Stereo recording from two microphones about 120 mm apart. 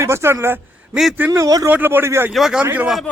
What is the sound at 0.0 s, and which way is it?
A man's voice, 20° right (ahead or behind).